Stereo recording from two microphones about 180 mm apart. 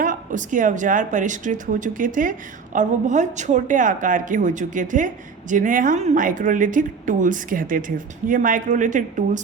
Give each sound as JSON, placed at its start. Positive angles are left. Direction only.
{"t": 0.0, "sound": "a woman's voice", "side_deg": -50}